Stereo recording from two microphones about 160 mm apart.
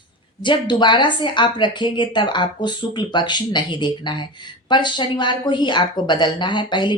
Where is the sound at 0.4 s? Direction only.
30° left (ahead or behind).